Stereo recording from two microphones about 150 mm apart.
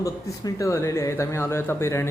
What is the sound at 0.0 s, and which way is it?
A man's voice, 20° left (ahead or behind).